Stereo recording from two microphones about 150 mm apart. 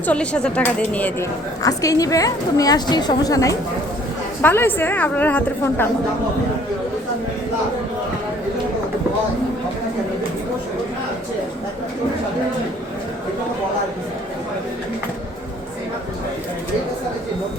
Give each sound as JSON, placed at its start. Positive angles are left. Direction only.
{"t": 0.0, "sound": "a woman's voice", "side_deg": 10}
{"t": 1.6, "sound": "a woman's voice", "side_deg": 20}